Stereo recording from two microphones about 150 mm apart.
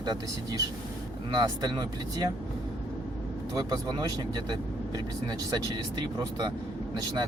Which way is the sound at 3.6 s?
25° right (ahead or behind).